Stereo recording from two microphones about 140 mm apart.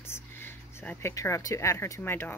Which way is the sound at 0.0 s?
15° left (ahead or behind).